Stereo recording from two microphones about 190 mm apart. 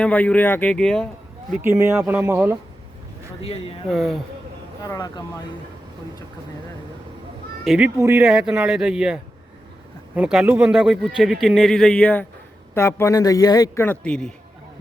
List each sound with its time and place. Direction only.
0.0 s a man's voice: 5° left (ahead or behind)
1.5 s speech: 15° right (ahead or behind)
3.4 s speech: 30° left (ahead or behind)
3.8 s speech: centre (ahead or behind)
4.8 s speech: 20° left (ahead or behind)
7.6 s a man's voice: centre (ahead or behind)